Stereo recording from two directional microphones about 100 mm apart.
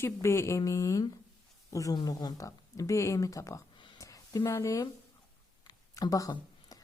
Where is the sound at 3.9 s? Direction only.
35° left (ahead or behind).